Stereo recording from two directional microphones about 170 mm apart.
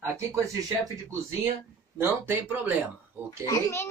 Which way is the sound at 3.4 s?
15° left (ahead or behind).